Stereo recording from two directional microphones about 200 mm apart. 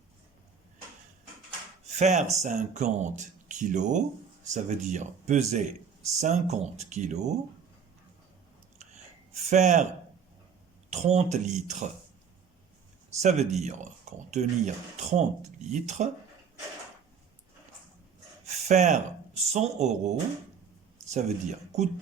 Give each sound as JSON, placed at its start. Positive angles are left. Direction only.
{"t": 2.0, "sound": "speech", "side_deg": -35}
{"t": 8.8, "sound": "a sound", "side_deg": -35}
{"t": 10.8, "sound": "speech", "side_deg": -35}
{"t": 13.1, "sound": "speech", "side_deg": -35}
{"t": 18.4, "sound": "speech", "side_deg": -35}